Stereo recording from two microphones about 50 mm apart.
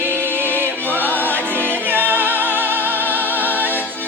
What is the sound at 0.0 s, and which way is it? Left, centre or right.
Music, right.